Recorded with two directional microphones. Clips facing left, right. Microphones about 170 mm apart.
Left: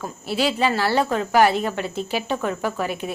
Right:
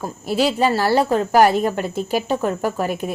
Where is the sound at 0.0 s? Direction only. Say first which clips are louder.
Right 3 dB; 40° right (ahead or behind).